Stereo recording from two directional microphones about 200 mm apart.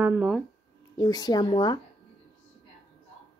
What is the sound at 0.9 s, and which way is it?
Speech, 20° left (ahead or behind).